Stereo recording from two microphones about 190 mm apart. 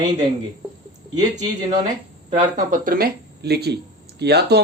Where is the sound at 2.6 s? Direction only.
45° right (ahead or behind).